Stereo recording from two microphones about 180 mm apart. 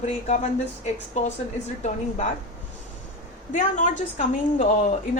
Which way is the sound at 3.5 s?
40° left (ahead or behind).